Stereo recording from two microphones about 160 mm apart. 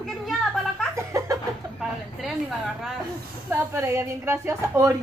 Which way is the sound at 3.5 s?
15° right (ahead or behind).